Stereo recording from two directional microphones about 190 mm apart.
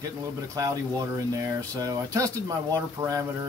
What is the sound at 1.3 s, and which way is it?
Speech, 15° right (ahead or behind).